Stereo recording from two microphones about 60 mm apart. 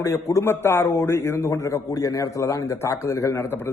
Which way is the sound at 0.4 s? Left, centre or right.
Left.